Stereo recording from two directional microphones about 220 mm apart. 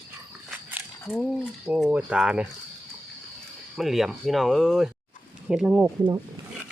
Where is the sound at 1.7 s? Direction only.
5° right (ahead or behind).